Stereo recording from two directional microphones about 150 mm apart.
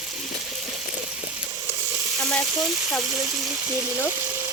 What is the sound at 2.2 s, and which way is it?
Speech, 5° left (ahead or behind).